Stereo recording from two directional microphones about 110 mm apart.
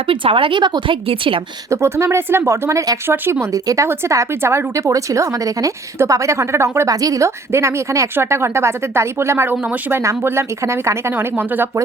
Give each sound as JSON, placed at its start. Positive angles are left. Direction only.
{"t": 0.1, "sound": "a woman's voice", "side_deg": -55}
{"t": 1.7, "sound": "speech", "side_deg": -25}